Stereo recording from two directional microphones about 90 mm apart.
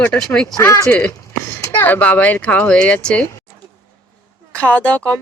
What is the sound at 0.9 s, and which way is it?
Speech, 20° left (ahead or behind).